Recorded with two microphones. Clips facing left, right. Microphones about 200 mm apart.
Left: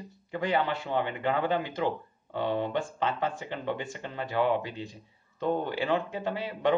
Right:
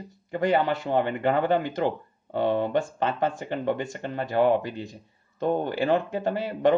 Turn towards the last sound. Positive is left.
turn(degrees=-45)  # may be behind; listen again after turning